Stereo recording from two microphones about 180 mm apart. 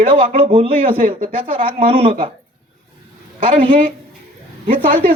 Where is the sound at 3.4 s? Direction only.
30° right (ahead or behind).